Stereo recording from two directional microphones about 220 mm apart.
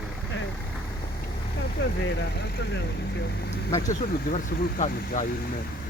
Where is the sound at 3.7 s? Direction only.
35° left (ahead or behind).